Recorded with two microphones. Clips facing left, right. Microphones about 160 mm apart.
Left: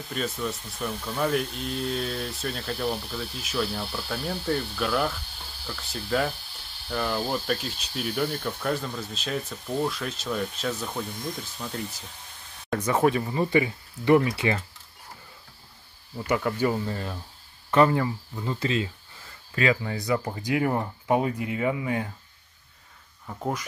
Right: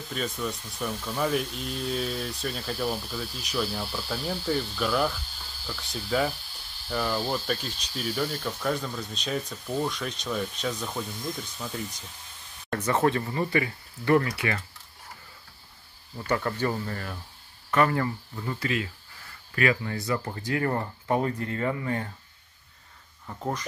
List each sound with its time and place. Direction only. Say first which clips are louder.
0.1 s speech: left 1 dB; 5° left (ahead or behind)
7.2 s speech: left 1 dB; 10° left (ahead or behind)
7.9 s speech: left 1 dB; 5° right (ahead or behind)
8.2 s speech: left 2 dB; 10° left (ahead or behind)
12.7 s speech: left 2 dB; 10° left (ahead or behind)
16.3 s speech: left 2 dB; 10° left (ahead or behind)
23.2 s speech: left 1 dB; 5° left (ahead or behind)